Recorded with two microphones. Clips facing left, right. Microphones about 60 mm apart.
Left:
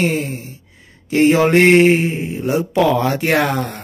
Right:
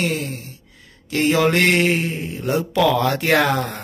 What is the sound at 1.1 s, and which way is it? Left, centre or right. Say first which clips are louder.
Mantra: left 5 dB; left.